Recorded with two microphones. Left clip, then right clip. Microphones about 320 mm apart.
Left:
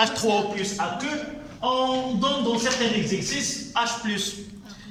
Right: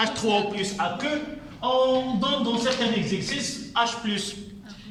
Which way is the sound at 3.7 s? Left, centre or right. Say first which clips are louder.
Right 1 dB; centre.